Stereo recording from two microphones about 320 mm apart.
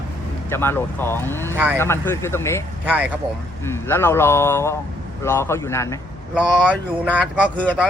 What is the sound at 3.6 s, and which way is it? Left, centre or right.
Speech, centre.